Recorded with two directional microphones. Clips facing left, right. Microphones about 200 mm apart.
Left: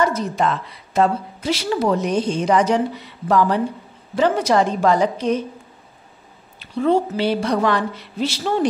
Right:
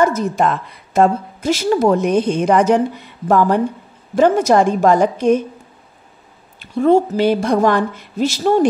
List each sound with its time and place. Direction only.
0.0 s a woman's voice: 45° right (ahead or behind)
6.6 s a woman's voice: 45° right (ahead or behind)